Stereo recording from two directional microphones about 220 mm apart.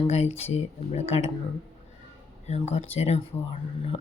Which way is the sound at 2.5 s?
30° left (ahead or behind).